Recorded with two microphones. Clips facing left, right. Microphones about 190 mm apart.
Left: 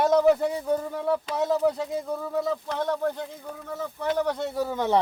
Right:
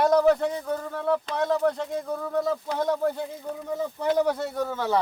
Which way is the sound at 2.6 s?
10° right (ahead or behind).